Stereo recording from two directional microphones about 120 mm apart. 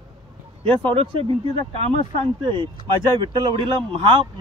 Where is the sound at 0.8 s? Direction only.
45° right (ahead or behind).